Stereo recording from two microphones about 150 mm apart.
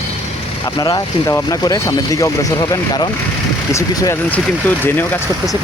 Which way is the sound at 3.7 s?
20° left (ahead or behind).